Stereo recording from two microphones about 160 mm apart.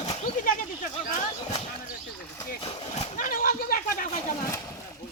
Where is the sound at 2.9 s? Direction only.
60° left (ahead or behind).